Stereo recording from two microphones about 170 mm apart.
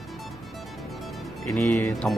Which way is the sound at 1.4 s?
Centre (ahead or behind).